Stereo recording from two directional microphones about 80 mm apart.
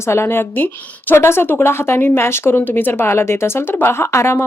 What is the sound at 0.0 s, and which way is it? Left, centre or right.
A woman's voice, left.